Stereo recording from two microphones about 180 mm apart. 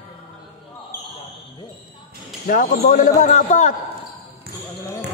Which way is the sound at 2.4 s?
50° left (ahead or behind).